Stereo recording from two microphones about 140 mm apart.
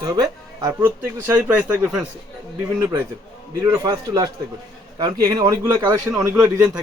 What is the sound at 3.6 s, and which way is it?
A man's voice, 25° right (ahead or behind).